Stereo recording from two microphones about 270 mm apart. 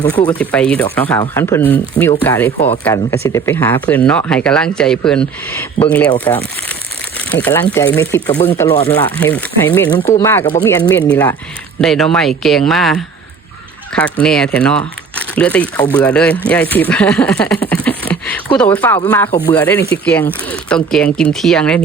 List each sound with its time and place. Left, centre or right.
0.3 s speech: centre